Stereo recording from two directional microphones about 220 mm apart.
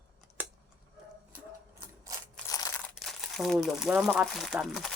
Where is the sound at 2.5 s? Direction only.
15° left (ahead or behind).